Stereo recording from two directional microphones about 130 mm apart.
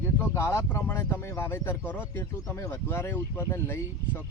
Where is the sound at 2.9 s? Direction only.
20° left (ahead or behind).